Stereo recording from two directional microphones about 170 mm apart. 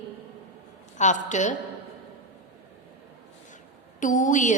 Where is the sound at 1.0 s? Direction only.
45° left (ahead or behind).